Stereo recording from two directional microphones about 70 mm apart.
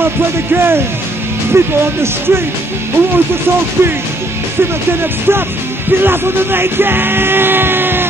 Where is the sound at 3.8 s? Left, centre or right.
Right.